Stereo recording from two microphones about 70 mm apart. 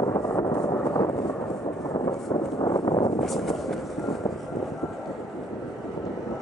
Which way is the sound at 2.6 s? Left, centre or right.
Left.